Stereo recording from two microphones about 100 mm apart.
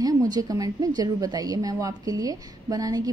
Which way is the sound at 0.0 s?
40° right (ahead or behind).